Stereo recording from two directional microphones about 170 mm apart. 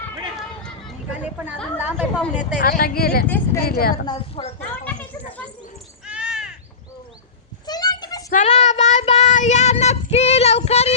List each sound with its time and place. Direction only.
1.2 s a woman's voice: 10° right (ahead or behind)
2.6 s speech: 55° left (ahead or behind)
3.2 s speech: 10° left (ahead or behind)
3.6 s speech: 60° left (ahead or behind)
4.4 s speech: 30° left (ahead or behind)
6.1 s crow: 5° right (ahead or behind)
7.7 s a sound: 25° left (ahead or behind)
8.3 s child singing: 45° left (ahead or behind)